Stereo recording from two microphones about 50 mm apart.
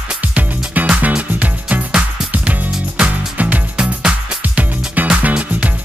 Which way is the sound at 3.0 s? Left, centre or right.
Right.